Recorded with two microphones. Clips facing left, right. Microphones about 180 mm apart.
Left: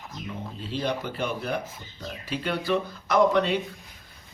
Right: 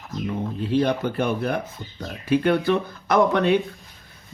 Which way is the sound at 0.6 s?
55° right (ahead or behind).